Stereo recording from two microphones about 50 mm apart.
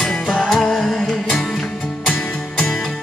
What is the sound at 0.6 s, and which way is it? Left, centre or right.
Music, centre.